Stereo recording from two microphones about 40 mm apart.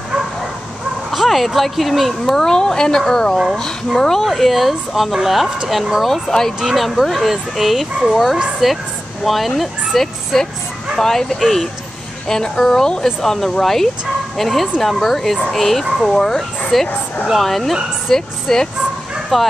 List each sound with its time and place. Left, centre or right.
1.1 s speech: centre
2.3 s speech: centre
4.2 s speech: centre
19.3 s speech: centre